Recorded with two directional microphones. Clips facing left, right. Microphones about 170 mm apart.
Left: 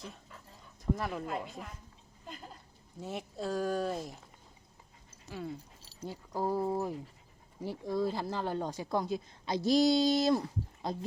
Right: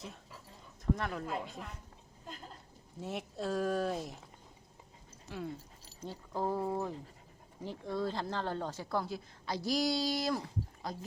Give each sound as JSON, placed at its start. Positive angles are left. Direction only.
{"t": 0.9, "sound": "speech", "side_deg": 5}
{"t": 3.0, "sound": "speech", "side_deg": 0}
{"t": 5.3, "sound": "speech", "side_deg": 0}